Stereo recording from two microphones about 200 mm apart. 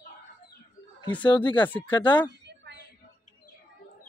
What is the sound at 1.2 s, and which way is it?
Speech, 25° left (ahead or behind).